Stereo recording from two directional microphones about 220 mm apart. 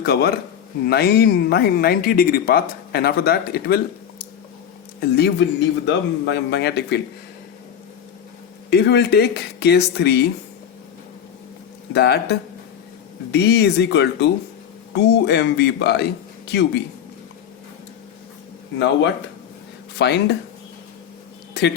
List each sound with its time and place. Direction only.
0.0 s speech: 45° left (ahead or behind)
4.9 s speech: 45° left (ahead or behind)
8.7 s speech: 50° left (ahead or behind)
11.9 s speech: 50° left (ahead or behind)
20.0 s speech: 50° left (ahead or behind)